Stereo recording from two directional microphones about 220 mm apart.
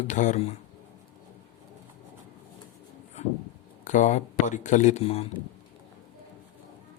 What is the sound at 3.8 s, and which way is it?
Speech, 35° left (ahead or behind).